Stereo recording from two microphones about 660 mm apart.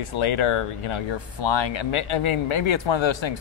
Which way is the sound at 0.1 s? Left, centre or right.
Left.